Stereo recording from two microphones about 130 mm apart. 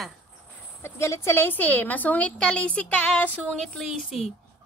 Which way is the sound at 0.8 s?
20° left (ahead or behind).